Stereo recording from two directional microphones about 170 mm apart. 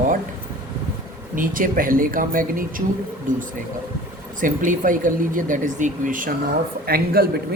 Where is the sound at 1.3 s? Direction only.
55° right (ahead or behind).